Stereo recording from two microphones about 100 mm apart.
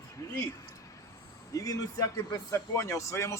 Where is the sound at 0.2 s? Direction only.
30° left (ahead or behind).